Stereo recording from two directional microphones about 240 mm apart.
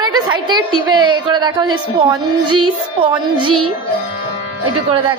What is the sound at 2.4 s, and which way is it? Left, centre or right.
Music, right.